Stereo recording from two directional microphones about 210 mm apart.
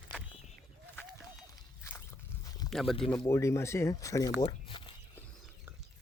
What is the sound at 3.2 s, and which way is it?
Speech, 15° left (ahead or behind).